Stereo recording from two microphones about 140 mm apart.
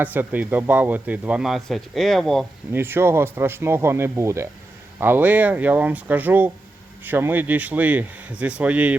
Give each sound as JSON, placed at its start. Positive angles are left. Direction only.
{"t": 0.0, "sound": "speech", "side_deg": -10}
{"t": 2.7, "sound": "speech", "side_deg": -15}